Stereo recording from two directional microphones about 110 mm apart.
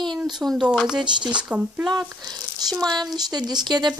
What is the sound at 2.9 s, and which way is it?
Speech, 40° right (ahead or behind).